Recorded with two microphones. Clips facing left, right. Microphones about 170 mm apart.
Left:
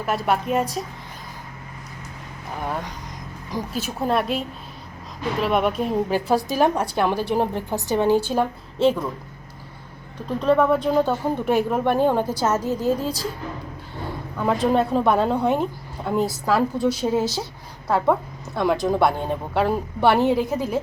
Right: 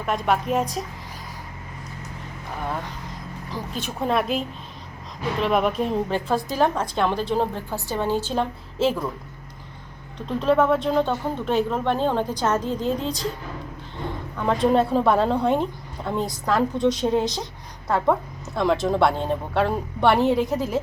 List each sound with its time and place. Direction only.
0.0 s a woman's voice: 5° left (ahead or behind)
3.5 s a woman's voice: 10° left (ahead or behind)
8.8 s a woman's voice: 5° right (ahead or behind)
10.2 s a woman's voice: centre (ahead or behind)
14.3 s a woman's voice: 5° left (ahead or behind)